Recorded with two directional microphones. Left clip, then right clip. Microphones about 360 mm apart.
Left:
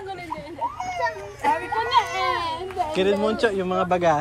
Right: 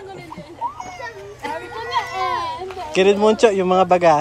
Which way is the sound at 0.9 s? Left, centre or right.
Centre.